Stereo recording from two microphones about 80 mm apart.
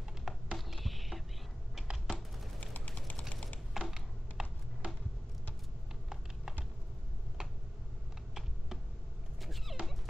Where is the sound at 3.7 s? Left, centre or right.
Centre.